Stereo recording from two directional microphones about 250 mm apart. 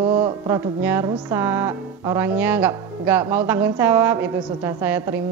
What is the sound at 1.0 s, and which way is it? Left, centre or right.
Speech, centre.